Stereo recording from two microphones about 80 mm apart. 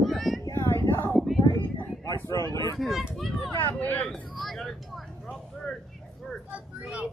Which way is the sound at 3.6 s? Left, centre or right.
Left.